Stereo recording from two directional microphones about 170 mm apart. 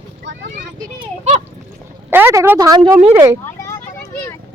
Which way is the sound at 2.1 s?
15° right (ahead or behind).